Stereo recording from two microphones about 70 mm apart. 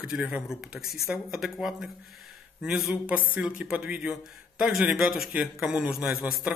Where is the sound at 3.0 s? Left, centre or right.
Right; by 5.8 s centre.